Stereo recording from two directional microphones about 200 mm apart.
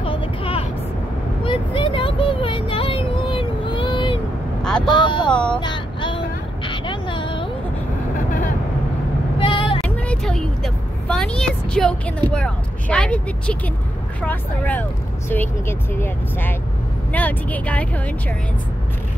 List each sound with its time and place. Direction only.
0.0 s vehicle: 25° left (ahead or behind)
4.8 s speech: 25° left (ahead or behind)
5.3 s a sound: 5° left (ahead or behind)
5.6 s vehicle: 25° left (ahead or behind)
9.4 s vehicle: 25° left (ahead or behind)
9.8 s vehicle: 5° left (ahead or behind)
14.2 s speech: 10° left (ahead or behind)